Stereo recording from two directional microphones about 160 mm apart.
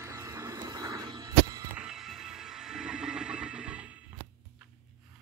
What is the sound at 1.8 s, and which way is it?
Music, 5° right (ahead or behind).